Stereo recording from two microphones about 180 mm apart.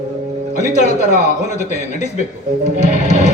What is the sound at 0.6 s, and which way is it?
Speech, 40° left (ahead or behind).